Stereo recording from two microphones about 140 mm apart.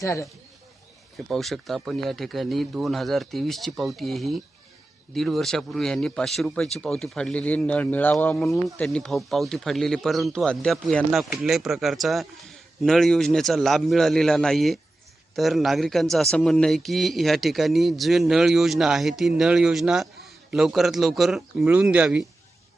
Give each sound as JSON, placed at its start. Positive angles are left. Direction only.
{"t": 0.0, "sound": "speech", "side_deg": 20}
{"t": 1.3, "sound": "a man's voice", "side_deg": 0}